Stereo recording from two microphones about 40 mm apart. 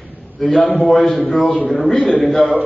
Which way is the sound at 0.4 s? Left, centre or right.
Centre.